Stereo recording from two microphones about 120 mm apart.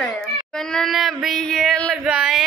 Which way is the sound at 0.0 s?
5° left (ahead or behind).